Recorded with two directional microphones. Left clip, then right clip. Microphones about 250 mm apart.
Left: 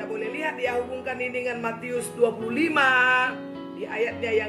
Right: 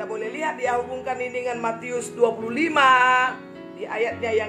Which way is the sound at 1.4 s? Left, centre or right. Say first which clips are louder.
Right 3 dB; centre.